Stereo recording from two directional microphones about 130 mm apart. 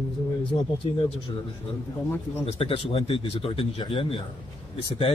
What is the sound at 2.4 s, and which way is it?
A man's voice, 45° left (ahead or behind).